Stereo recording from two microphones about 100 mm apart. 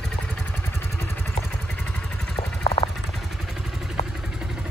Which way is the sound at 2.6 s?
65° left (ahead or behind).